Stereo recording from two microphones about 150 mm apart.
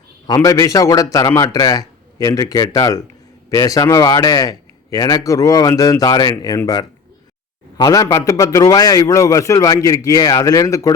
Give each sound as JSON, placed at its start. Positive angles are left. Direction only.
{"t": 0.3, "sound": "a man's voice", "side_deg": 20}